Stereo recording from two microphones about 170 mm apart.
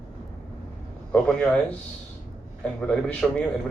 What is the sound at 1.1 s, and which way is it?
Speech, 5° left (ahead or behind).